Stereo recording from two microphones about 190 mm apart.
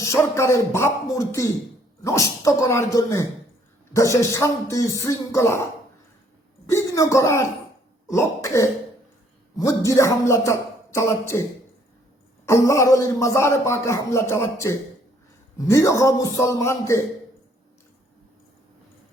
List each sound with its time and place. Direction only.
0.0 s a man's voice: 15° left (ahead or behind)
6.7 s a man's voice: 15° left (ahead or behind)
12.5 s a man's voice: 15° left (ahead or behind)